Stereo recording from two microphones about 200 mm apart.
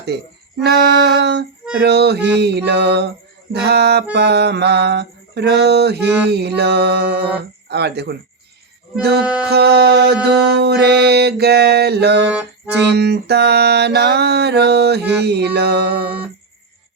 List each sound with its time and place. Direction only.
0.6 s music: 55° right (ahead or behind)